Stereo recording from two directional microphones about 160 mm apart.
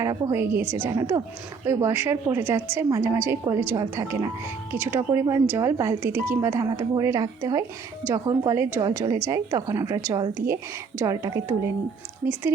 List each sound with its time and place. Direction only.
0.0 s a woman's voice: 20° right (ahead or behind)
8.0 s speech: 10° left (ahead or behind)
8.4 s a woman's voice: 15° right (ahead or behind)